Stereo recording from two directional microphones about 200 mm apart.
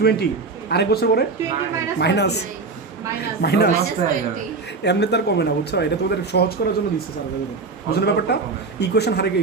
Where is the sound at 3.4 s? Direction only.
55° left (ahead or behind).